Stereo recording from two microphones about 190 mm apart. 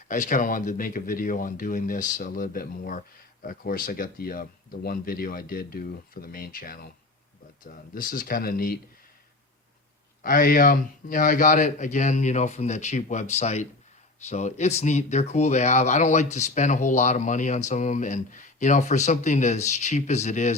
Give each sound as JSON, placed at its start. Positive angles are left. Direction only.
{"t": 0.1, "sound": "speech", "side_deg": 40}
{"t": 10.2, "sound": "speech", "side_deg": 45}